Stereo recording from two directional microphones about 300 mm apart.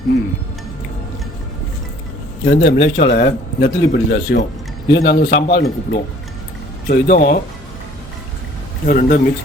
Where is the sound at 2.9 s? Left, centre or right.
Left.